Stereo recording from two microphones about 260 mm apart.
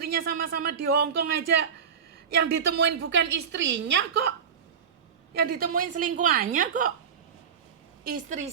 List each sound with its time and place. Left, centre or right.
0.0 s a woman's voice: right
8.0 s a woman's voice: right